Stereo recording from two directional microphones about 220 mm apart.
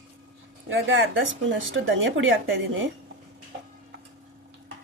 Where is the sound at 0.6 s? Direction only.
60° right (ahead or behind).